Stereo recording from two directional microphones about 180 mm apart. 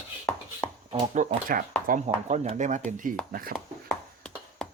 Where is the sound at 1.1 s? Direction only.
50° right (ahead or behind).